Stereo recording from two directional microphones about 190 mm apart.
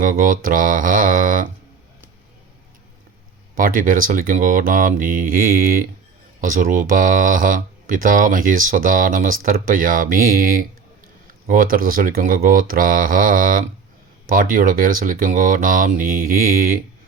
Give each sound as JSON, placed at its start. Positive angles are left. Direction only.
{"t": 0.0, "sound": "speech", "side_deg": -45}
{"t": 3.5, "sound": "speech", "side_deg": -45}